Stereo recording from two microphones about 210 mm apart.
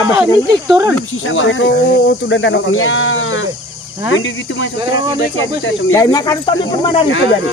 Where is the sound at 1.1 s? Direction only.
70° left (ahead or behind).